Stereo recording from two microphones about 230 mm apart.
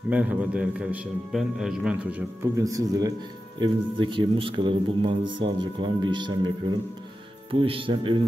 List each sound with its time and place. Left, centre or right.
0.1 s a man's voice: centre
7.5 s speech: right